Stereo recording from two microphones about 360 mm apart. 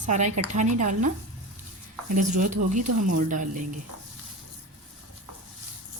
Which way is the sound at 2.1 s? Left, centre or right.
Right.